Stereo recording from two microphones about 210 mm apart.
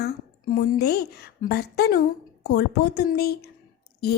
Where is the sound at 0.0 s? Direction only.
50° left (ahead or behind).